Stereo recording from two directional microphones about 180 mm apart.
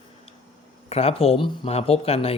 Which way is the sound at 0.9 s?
35° left (ahead or behind).